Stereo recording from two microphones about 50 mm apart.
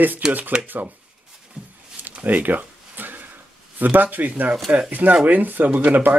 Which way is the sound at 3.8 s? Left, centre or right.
Right.